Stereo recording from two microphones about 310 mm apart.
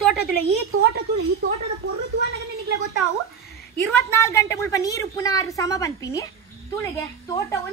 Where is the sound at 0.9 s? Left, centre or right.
Right.